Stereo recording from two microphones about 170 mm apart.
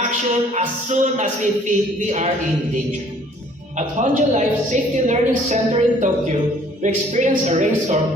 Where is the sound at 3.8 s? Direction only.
45° right (ahead or behind).